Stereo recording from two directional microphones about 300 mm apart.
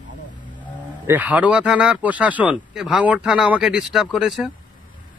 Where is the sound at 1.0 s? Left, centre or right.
Centre.